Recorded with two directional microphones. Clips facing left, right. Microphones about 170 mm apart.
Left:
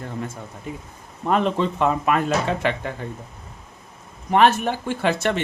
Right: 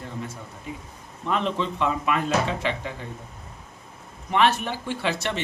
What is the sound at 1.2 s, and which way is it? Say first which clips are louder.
Speech: left 5 dB; 45° left (ahead or behind).